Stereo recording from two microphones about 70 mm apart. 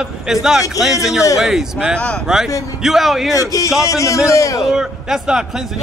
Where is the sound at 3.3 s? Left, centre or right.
Left.